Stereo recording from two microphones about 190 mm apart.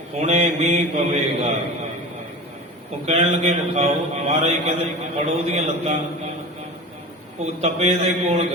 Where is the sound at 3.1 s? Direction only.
35° right (ahead or behind).